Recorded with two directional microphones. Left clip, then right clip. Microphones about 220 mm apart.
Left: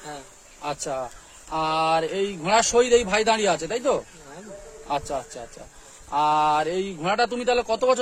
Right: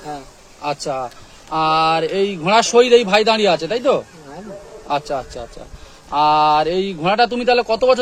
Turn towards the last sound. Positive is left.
turn(degrees=45)  # may be behind; listen again after turning